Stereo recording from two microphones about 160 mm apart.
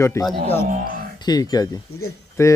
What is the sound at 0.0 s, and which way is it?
Speech, 15° left (ahead or behind).